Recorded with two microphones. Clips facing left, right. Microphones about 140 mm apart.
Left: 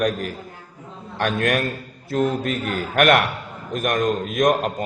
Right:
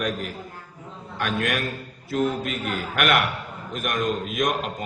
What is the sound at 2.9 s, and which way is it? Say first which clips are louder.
A man's voice: left 6 dB; 45° left (ahead or behind).